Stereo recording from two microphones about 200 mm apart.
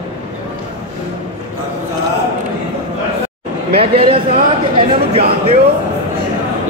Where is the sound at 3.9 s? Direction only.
25° right (ahead or behind).